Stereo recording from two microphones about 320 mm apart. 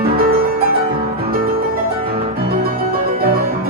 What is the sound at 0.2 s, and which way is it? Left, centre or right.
Music, right.